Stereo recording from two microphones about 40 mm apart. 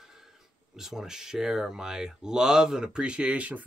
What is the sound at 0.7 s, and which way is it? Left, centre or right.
Speech, centre.